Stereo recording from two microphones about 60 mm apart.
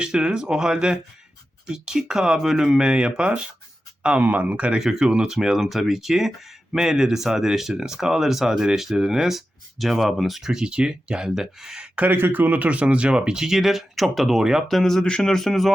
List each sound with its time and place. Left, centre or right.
0.0 s speech: centre
4.8 s speech: centre
11.9 s speech: right; by 14.6 s centre
14.7 s a man's voice: centre